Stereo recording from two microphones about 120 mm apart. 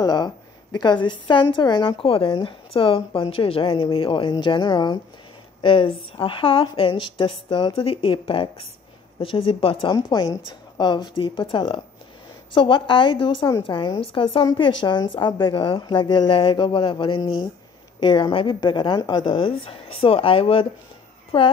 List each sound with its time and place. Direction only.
0.0 s a woman's voice: 35° left (ahead or behind)
10.0 s a woman's voice: 35° left (ahead or behind)